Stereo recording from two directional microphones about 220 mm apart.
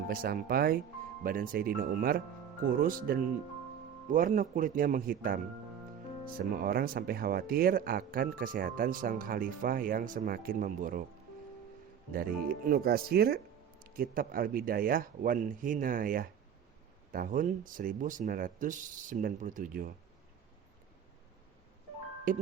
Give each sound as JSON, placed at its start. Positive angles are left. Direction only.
{"t": 0.1, "sound": "speech", "side_deg": -40}
{"t": 6.5, "sound": "speech", "side_deg": -40}
{"t": 12.1, "sound": "speech", "side_deg": -40}
{"t": 22.3, "sound": "speech", "side_deg": -35}